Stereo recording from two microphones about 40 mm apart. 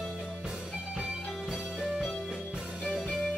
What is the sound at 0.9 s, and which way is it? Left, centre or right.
Music, right.